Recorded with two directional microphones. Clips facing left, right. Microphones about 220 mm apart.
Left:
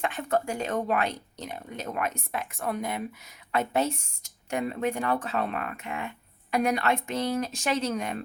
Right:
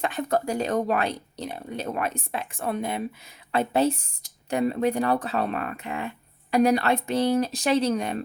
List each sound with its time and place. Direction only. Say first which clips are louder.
0.0 s speech: right 2 dB; 35° right (ahead or behind)